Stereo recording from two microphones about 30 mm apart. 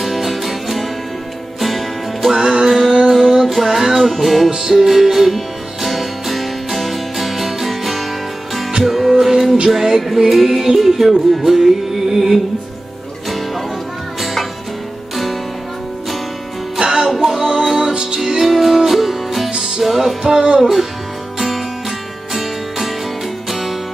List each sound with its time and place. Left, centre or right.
0.0 s music: centre
2.3 s music: centre
2.7 s music: centre
4.6 s music: centre
12.1 s music: centre
14.2 s music: centre
16.7 s music: right
17.1 s music: centre